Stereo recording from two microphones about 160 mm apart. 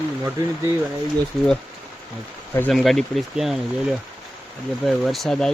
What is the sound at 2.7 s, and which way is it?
Speech, centre (ahead or behind).